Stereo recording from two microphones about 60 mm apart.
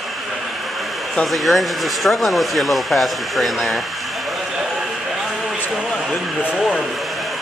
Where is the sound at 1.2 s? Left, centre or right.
Centre.